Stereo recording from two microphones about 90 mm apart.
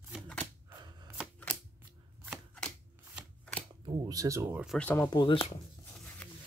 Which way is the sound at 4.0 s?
40° right (ahead or behind).